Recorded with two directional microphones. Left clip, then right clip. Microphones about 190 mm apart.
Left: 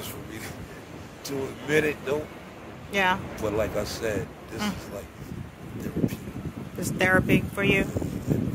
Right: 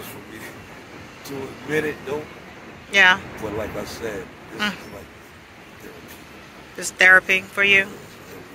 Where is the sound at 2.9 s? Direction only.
15° left (ahead or behind).